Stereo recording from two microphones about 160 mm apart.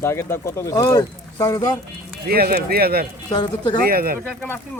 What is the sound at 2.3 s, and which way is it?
Speech, 75° right (ahead or behind).